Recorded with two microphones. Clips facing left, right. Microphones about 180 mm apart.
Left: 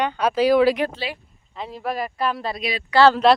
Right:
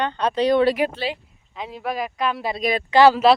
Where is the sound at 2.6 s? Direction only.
50° right (ahead or behind).